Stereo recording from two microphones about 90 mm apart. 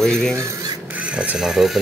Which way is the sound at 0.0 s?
5° left (ahead or behind).